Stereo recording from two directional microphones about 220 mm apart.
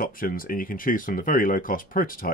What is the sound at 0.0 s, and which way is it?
Speech, 40° left (ahead or behind).